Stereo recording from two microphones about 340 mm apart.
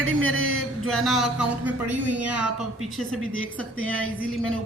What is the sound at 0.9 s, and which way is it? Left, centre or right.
Speech, centre.